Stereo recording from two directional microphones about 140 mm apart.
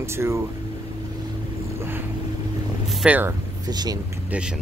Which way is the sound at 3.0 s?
10° right (ahead or behind).